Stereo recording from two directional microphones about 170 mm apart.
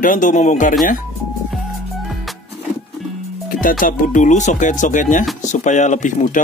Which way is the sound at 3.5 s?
55° left (ahead or behind).